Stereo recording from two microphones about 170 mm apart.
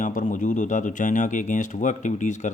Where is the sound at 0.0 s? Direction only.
50° left (ahead or behind).